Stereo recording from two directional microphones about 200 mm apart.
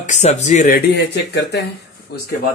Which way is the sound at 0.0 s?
35° left (ahead or behind).